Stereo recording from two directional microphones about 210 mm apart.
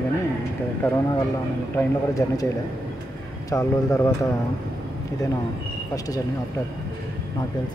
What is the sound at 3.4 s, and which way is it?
Speech, 15° left (ahead or behind).